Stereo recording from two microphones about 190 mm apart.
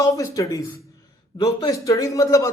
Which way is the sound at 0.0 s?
15° left (ahead or behind).